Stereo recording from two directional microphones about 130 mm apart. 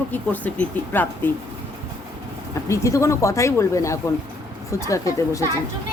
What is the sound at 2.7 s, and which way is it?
Speech, 25° left (ahead or behind).